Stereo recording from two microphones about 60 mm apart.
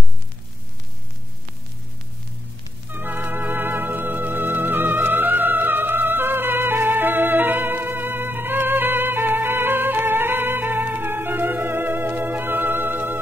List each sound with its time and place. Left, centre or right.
2.9 s music: right